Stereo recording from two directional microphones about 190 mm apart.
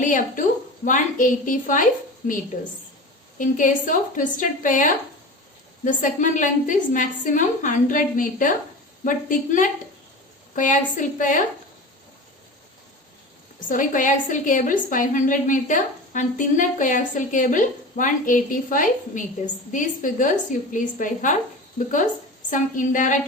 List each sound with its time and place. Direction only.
0.0 s a woman's voice: 40° left (ahead or behind)
3.3 s a woman's voice: 45° left (ahead or behind)
13.7 s a woman's voice: 45° left (ahead or behind)
22.4 s a woman's voice: 45° left (ahead or behind)